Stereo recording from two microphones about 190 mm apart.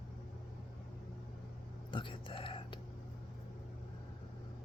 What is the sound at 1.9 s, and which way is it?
Whispering, 25° left (ahead or behind).